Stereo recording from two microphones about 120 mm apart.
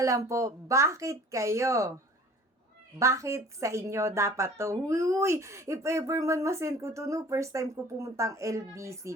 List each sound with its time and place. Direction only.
0.0 s a woman's voice: 25° right (ahead or behind)
3.0 s a woman's voice: 25° right (ahead or behind)